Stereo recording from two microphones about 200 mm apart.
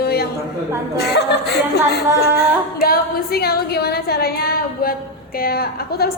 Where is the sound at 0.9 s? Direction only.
55° left (ahead or behind).